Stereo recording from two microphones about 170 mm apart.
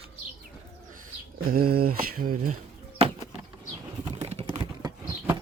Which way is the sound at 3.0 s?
35° right (ahead or behind).